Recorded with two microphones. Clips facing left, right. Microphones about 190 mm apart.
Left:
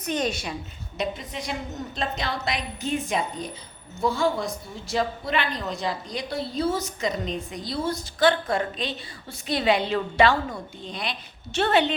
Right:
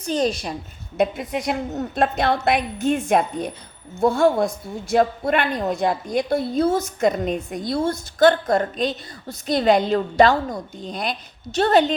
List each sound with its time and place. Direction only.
0.0 s a woman's voice: 35° right (ahead or behind)
0.9 s a woman's voice: 55° right (ahead or behind); by 11.9 s 40° right (ahead or behind)